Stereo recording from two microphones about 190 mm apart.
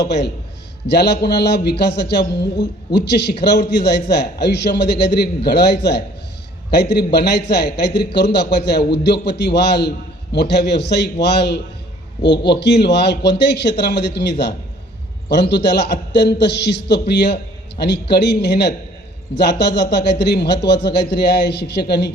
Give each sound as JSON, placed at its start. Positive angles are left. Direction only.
{"t": 0.0, "sound": "a man's voice", "side_deg": 65}